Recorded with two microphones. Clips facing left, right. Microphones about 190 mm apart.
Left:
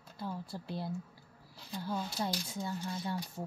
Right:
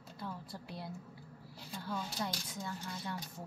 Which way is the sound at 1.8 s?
30° left (ahead or behind).